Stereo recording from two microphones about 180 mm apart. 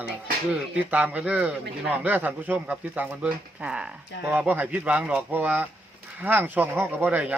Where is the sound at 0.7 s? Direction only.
10° right (ahead or behind).